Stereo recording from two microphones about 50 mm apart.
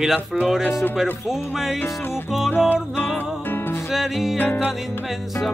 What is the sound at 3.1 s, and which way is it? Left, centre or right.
Music, left.